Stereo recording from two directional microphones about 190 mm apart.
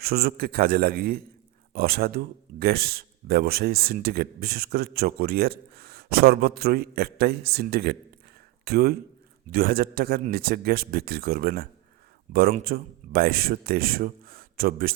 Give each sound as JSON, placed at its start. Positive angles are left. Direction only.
{"t": 0.0, "sound": "speech", "side_deg": -55}
{"t": 12.3, "sound": "a man's voice", "side_deg": -40}
{"t": 12.6, "sound": "speech", "side_deg": -50}